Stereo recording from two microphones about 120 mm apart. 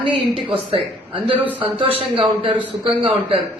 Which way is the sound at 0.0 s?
45° right (ahead or behind).